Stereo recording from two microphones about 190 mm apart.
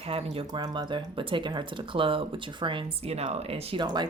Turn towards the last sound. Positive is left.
turn(degrees=-25)  # may be behind; listen again after turning